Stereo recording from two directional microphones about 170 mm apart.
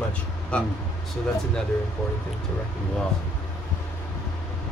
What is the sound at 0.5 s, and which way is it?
Speech, 5° left (ahead or behind).